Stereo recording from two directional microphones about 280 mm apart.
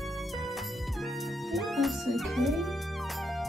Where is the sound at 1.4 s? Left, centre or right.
Centre.